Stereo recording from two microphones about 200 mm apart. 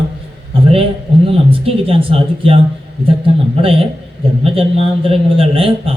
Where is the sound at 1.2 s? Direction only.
25° right (ahead or behind).